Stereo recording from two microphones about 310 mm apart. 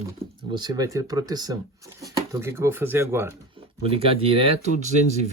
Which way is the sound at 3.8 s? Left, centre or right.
Centre.